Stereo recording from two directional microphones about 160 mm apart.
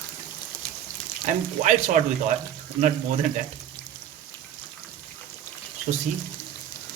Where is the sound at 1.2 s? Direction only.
50° right (ahead or behind).